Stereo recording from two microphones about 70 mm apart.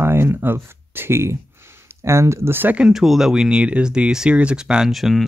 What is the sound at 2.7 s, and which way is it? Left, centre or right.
Speech, centre.